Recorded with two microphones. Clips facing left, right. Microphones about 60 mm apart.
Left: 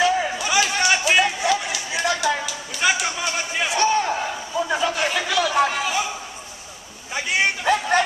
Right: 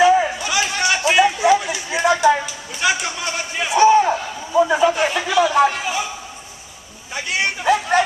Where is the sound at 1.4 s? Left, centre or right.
Right.